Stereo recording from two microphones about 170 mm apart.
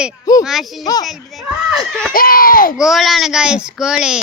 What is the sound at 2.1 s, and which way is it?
Speech, 55° left (ahead or behind).